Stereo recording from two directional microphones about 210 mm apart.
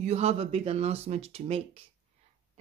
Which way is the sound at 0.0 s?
30° right (ahead or behind).